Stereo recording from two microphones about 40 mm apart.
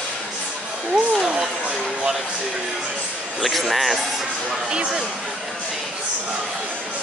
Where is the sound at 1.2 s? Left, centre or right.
Right.